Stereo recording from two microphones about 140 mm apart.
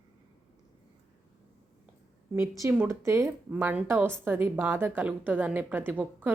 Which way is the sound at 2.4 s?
20° right (ahead or behind).